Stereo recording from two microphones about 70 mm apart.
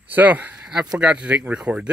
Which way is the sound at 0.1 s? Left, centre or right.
Right.